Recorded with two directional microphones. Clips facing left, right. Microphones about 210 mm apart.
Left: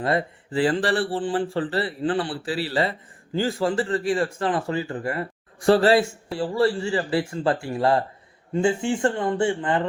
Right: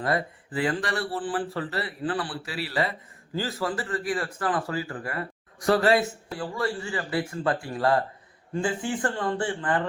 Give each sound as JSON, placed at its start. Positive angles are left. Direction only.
{"t": 0.0, "sound": "speech", "side_deg": 25}